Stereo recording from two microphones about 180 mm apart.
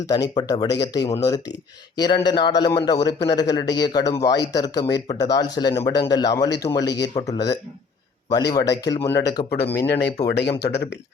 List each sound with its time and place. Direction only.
0.3 s speech: 20° left (ahead or behind)
6.8 s speech: 75° left (ahead or behind)
7.1 s speech: 20° left (ahead or behind)
9.7 s speech: 70° left (ahead or behind)